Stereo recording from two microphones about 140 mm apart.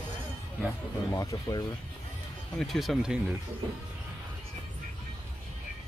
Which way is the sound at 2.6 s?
Centre (ahead or behind).